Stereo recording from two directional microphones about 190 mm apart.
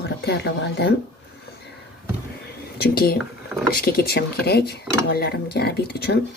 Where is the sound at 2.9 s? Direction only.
55° left (ahead or behind).